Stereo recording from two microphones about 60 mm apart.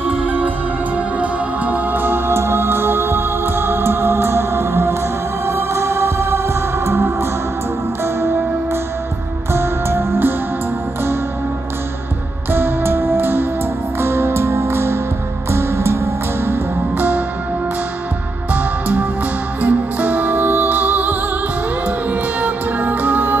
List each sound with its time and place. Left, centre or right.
0.1 s music: right
9.5 s music: right
12.4 s music: right
18.5 s music: right